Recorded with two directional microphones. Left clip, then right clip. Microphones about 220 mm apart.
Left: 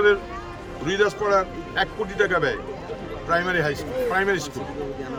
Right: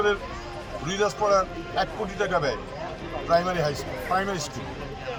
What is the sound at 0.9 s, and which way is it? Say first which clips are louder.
A man's voice: left 2 dB; 15° left (ahead or behind).